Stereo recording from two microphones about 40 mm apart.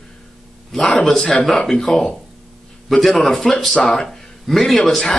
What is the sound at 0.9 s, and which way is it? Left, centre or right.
A man's voice, centre.